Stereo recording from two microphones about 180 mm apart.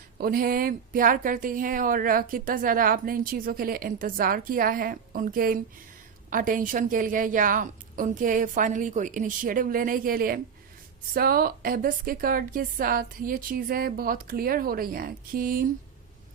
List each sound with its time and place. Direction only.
0.2 s a woman's voice: 55° right (ahead or behind)